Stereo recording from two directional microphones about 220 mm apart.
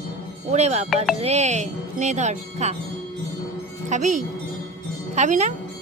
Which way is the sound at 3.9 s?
35° right (ahead or behind).